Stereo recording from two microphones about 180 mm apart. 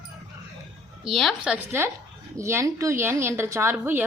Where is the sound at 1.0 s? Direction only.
Centre (ahead or behind).